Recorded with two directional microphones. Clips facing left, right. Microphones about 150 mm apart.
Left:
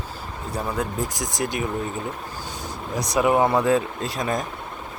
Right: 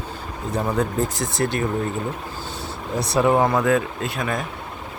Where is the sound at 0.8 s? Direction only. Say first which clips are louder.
Right 4 dB; 15° left (ahead or behind).